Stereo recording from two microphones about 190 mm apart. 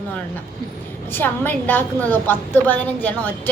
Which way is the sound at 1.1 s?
10° left (ahead or behind).